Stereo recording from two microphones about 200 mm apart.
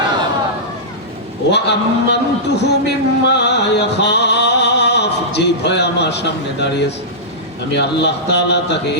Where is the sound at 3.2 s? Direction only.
60° left (ahead or behind).